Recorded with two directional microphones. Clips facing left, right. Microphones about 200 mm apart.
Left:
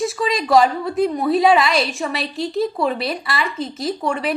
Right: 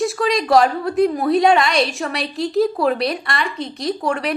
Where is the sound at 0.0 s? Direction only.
Centre (ahead or behind).